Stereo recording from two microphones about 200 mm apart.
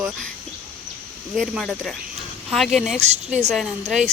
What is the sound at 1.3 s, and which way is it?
Speech, centre (ahead or behind).